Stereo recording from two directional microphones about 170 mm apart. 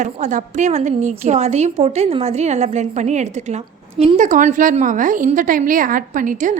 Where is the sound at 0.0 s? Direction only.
45° right (ahead or behind).